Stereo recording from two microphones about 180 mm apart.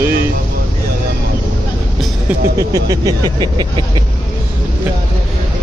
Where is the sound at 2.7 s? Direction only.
20° right (ahead or behind).